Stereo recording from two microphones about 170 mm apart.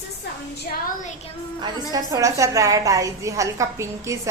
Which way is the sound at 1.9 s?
20° right (ahead or behind).